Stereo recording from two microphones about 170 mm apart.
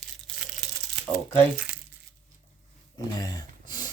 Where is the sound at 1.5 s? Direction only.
10° right (ahead or behind).